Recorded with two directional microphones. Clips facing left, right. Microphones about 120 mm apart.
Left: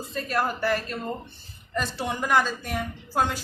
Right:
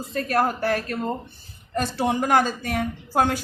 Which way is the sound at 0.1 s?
65° right (ahead or behind).